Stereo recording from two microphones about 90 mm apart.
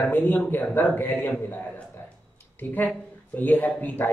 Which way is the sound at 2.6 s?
20° left (ahead or behind).